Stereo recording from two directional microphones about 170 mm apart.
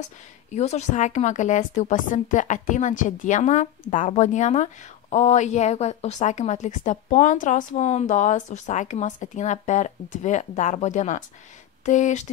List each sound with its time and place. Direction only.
0.5 s a woman's voice: 40° left (ahead or behind)